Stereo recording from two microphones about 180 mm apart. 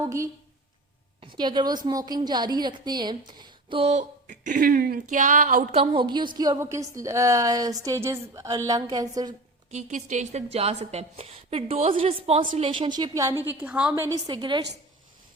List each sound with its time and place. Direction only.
0.0 s a woman's voice: 15° right (ahead or behind); by 5.6 s 45° right (ahead or behind)
5.7 s a woman's voice: 30° right (ahead or behind)
9.7 s a woman's voice: 40° right (ahead or behind); by 14.6 s 25° right (ahead or behind)